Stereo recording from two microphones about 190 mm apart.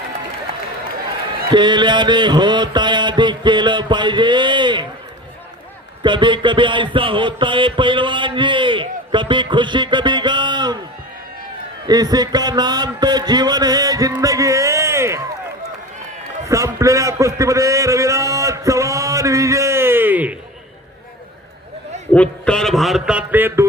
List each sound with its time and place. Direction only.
1.5 s mantra: 25° right (ahead or behind)
6.0 s mantra: 25° right (ahead or behind)
11.9 s a man's voice: 20° right (ahead or behind)
16.5 s a sound: 15° right (ahead or behind)
22.1 s a man's voice: 5° left (ahead or behind); by 23.6 s 10° right (ahead or behind)